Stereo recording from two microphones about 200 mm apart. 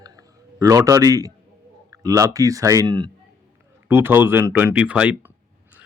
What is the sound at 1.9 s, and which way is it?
Speech, 15° right (ahead or behind).